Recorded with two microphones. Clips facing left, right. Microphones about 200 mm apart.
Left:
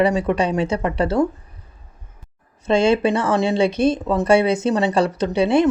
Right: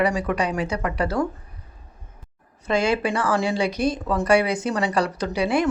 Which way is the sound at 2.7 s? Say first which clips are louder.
Left 5 dB; 25° left (ahead or behind).